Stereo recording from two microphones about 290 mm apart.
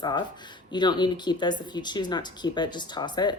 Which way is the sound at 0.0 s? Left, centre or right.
Centre.